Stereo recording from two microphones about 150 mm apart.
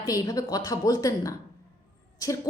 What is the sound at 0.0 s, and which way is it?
A woman's voice, 25° left (ahead or behind).